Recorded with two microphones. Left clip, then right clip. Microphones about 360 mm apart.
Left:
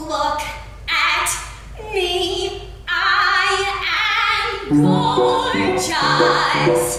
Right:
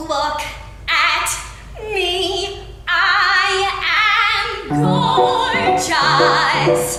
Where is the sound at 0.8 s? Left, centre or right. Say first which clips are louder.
Right 2 dB; centre.